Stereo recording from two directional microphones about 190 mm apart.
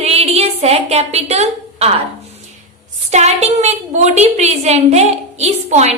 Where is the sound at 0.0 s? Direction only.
35° right (ahead or behind).